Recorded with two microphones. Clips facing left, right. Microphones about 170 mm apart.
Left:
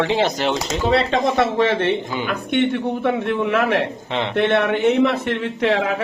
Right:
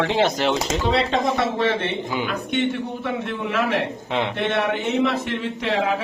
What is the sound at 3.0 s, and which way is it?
Speech, 60° left (ahead or behind).